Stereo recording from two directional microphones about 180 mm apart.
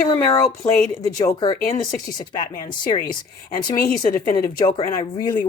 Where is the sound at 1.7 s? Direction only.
25° left (ahead or behind).